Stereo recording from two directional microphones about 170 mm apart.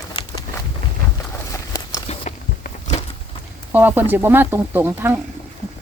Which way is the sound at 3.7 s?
10° right (ahead or behind).